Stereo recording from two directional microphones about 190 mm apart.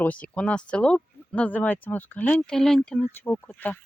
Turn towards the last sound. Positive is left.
turn(degrees=10)  # may be behind; listen again after turning